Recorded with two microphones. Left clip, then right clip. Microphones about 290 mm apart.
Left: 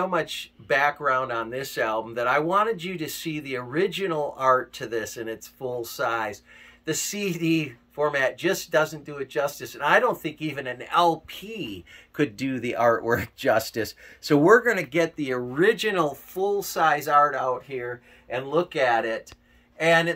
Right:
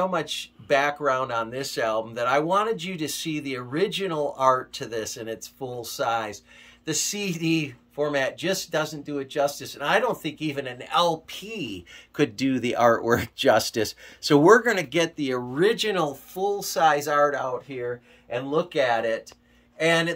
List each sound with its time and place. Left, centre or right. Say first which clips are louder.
0.7 s speech: even; centre